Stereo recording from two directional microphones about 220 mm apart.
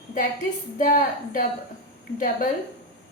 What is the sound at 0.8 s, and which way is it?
A woman's voice, 40° left (ahead or behind).